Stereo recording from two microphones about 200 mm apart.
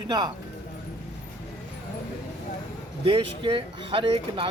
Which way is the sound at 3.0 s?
25° right (ahead or behind).